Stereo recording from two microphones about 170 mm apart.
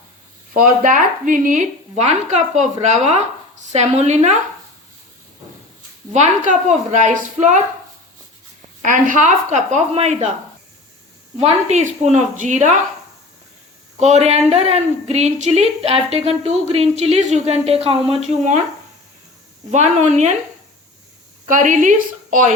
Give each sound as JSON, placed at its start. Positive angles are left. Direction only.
{"t": 0.5, "sound": "a woman's voice", "side_deg": -50}
{"t": 6.1, "sound": "a woman's voice", "side_deg": -45}
{"t": 8.8, "sound": "a woman's voice", "side_deg": -50}
{"t": 11.3, "sound": "a woman's voice", "side_deg": -40}
{"t": 14.0, "sound": "a woman's voice", "side_deg": -40}
{"t": 19.7, "sound": "a woman's voice", "side_deg": -45}
{"t": 21.4, "sound": "a woman's voice", "side_deg": -50}